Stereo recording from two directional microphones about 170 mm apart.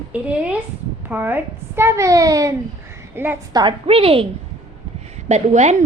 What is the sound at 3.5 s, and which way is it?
Speech, 25° right (ahead or behind).